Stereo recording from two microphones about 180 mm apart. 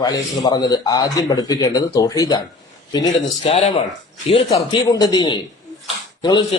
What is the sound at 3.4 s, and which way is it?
A man's voice, 35° left (ahead or behind).